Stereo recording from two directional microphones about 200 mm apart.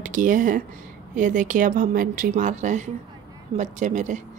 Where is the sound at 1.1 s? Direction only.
40° right (ahead or behind).